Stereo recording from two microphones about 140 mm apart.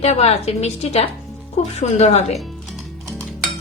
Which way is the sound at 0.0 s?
50° left (ahead or behind).